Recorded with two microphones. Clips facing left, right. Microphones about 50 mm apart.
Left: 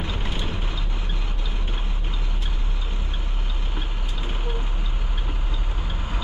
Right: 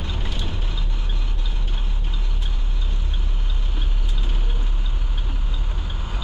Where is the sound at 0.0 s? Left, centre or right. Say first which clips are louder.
Left 2 dB; centre.